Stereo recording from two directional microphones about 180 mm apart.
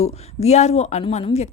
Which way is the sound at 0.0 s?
35° left (ahead or behind).